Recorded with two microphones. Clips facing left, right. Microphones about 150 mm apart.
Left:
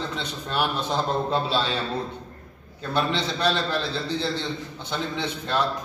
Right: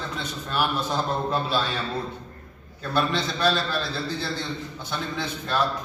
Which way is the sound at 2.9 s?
20° left (ahead or behind).